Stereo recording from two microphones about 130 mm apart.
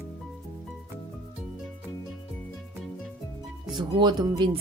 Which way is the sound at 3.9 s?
35° right (ahead or behind).